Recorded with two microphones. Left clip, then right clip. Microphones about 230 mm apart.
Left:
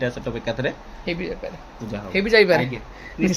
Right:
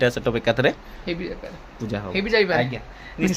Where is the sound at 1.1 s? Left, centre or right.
Centre.